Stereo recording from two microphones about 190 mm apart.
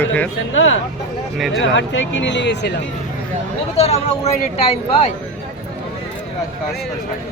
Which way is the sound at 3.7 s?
35° left (ahead or behind).